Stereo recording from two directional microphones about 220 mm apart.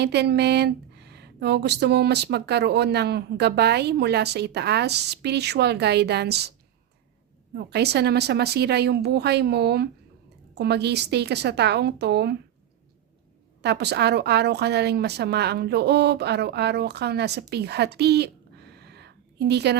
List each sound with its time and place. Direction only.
0.0 s speech: 50° right (ahead or behind)
7.5 s speech: 45° right (ahead or behind)
13.6 s speech: 50° right (ahead or behind)
17.5 s a sound: 50° right (ahead or behind)